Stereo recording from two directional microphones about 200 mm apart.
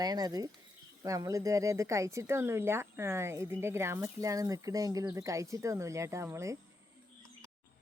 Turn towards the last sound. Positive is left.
turn(degrees=-15)  # may be behind; listen again after turning